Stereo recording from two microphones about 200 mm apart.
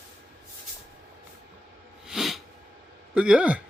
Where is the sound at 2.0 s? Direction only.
Centre (ahead or behind).